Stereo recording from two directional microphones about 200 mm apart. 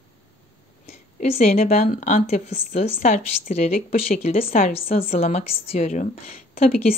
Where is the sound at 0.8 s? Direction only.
35° left (ahead or behind).